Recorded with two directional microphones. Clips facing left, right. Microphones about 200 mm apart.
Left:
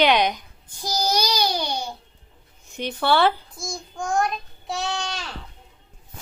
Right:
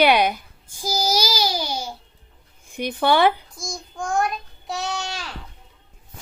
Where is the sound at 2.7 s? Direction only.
15° right (ahead or behind).